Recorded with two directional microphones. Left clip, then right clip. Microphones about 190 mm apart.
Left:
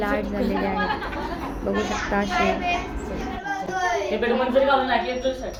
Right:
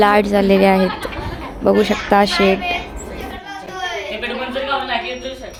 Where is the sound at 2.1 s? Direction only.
45° right (ahead or behind).